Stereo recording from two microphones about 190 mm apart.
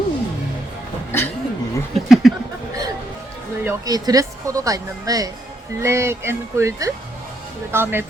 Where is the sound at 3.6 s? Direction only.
15° right (ahead or behind).